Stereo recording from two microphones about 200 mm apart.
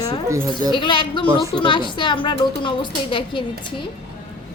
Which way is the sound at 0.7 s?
25° left (ahead or behind).